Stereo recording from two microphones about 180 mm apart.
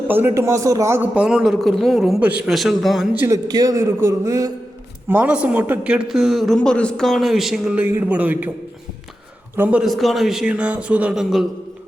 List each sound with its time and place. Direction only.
0.1 s a man's voice: 15° right (ahead or behind)
3.2 s a man's voice: 20° right (ahead or behind)
9.6 s a man's voice: 5° right (ahead or behind)